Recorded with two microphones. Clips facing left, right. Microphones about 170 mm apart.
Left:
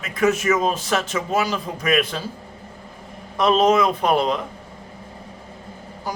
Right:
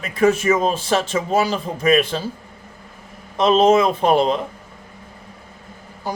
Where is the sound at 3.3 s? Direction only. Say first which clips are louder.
Right 3 dB; 25° right (ahead or behind).